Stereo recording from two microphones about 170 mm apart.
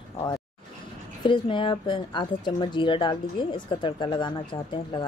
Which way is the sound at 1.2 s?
30° left (ahead or behind).